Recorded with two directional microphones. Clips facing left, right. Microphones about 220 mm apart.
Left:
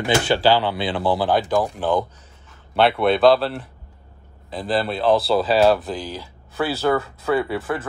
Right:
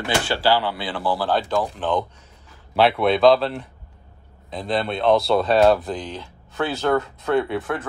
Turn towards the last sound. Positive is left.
turn(degrees=5)  # may be behind; listen again after turning